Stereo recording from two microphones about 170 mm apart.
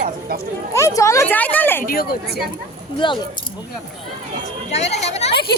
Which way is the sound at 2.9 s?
30° left (ahead or behind).